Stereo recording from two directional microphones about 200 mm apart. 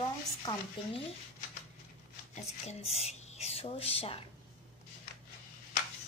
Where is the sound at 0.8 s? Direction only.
25° left (ahead or behind).